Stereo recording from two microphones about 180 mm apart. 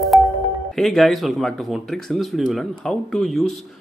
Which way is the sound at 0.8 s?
Centre (ahead or behind).